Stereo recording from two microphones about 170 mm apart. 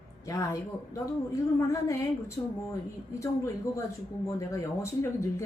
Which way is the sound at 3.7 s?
15° left (ahead or behind).